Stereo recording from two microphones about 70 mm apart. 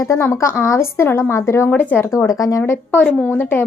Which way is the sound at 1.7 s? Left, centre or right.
Left.